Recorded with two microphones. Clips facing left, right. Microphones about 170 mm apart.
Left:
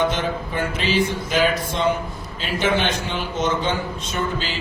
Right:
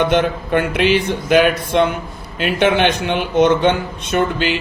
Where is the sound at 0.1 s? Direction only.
65° right (ahead or behind).